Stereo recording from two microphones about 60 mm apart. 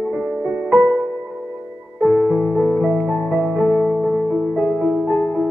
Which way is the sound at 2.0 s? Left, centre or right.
Centre.